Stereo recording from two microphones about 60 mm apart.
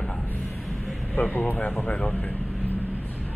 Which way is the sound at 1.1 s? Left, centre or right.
Left.